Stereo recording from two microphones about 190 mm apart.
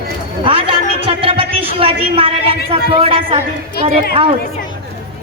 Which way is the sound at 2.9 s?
30° right (ahead or behind).